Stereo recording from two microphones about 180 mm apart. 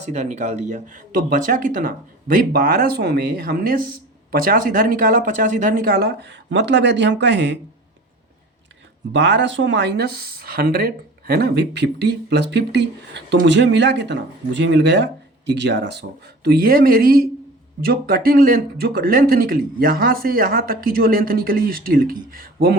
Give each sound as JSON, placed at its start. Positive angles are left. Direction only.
{"t": 0.0, "sound": "speech", "side_deg": -40}
{"t": 9.1, "sound": "speech", "side_deg": -80}